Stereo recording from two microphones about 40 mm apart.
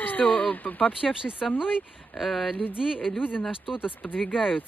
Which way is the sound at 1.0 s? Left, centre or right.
Centre.